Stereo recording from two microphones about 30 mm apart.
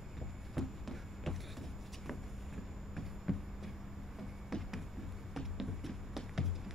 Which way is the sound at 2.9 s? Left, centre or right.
Centre.